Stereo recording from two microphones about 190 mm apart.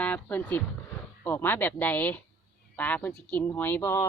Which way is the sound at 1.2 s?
10° left (ahead or behind).